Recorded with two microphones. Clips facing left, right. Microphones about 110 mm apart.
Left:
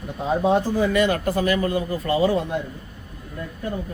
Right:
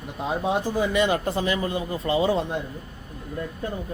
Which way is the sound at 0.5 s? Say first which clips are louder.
Left 3 dB; 15° right (ahead or behind).